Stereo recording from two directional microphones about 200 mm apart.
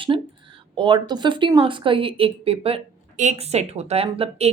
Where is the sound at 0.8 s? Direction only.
25° right (ahead or behind).